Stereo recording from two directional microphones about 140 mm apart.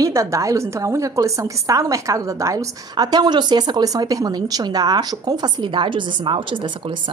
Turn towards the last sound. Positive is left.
turn(degrees=-35)  # may be behind; listen again after turning